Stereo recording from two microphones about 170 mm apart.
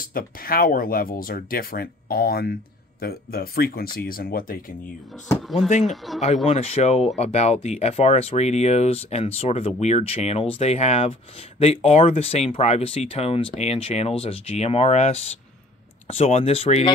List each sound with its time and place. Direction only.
0.0 s speech: 55° left (ahead or behind)
5.7 s speech: 40° left (ahead or behind)